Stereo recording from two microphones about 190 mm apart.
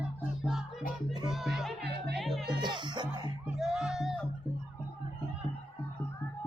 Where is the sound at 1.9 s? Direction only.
60° right (ahead or behind).